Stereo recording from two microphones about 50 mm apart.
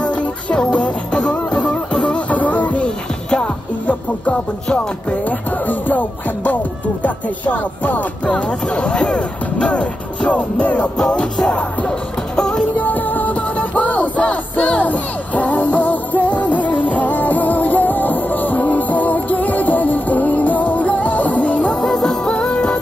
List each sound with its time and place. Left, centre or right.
0.0 s music: left
5.7 s music: left
8.3 s speech: centre
12.4 s music: centre
12.7 s music: left
21.8 s music: centre